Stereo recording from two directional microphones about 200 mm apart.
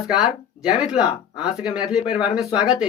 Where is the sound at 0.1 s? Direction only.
5° right (ahead or behind).